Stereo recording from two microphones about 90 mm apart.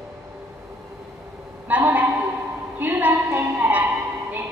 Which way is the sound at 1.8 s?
25° right (ahead or behind).